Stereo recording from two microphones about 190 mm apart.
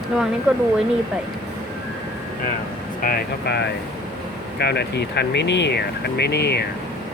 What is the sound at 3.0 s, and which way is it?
Speech, 50° left (ahead or behind).